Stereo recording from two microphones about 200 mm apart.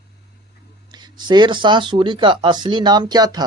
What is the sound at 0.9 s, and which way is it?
Speech, 20° right (ahead or behind).